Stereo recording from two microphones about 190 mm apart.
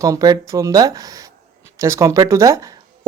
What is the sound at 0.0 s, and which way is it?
Speech, 20° right (ahead or behind).